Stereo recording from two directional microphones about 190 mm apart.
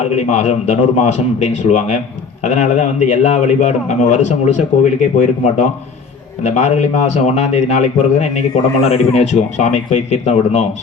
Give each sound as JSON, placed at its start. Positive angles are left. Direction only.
{"t": 0.0, "sound": "a man's voice", "side_deg": 35}